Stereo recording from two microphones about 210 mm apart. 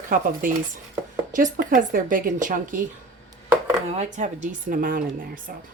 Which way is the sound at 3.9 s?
35° right (ahead or behind).